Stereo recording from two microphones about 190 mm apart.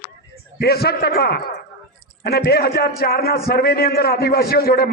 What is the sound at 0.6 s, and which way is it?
A man's voice, 55° left (ahead or behind).